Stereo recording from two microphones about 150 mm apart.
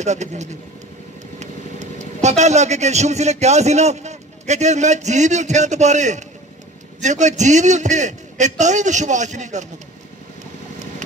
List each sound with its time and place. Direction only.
0.0 s a man's voice: 50° right (ahead or behind)